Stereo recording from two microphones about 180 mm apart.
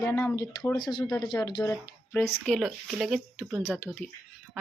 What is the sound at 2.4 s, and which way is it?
Speech, centre (ahead or behind).